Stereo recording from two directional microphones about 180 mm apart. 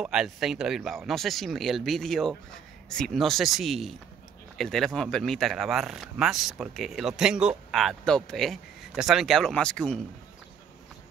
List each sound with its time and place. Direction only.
0.0 s speech: 5° right (ahead or behind)